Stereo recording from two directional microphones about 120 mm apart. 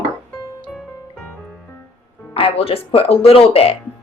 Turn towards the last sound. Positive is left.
turn(degrees=55)  # may be behind; listen again after turning